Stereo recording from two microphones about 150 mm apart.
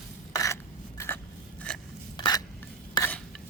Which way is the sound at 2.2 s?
25° left (ahead or behind).